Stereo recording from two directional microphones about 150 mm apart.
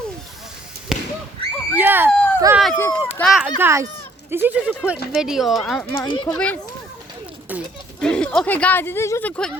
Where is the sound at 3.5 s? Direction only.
15° right (ahead or behind); by 6.0 s 10° left (ahead or behind).